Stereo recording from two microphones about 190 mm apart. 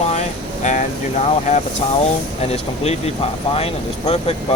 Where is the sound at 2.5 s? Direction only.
35° left (ahead or behind).